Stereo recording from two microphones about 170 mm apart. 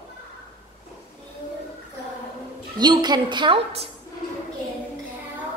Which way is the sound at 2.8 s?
25° right (ahead or behind).